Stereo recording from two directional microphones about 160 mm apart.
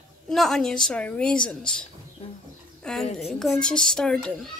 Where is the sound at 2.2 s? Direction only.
35° left (ahead or behind).